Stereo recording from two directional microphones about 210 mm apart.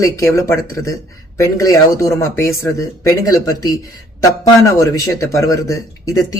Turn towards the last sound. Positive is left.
turn(degrees=15)  # may be behind; listen again after turning